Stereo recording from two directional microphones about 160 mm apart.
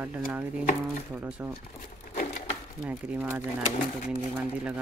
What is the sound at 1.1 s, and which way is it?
Speech, 10° right (ahead or behind).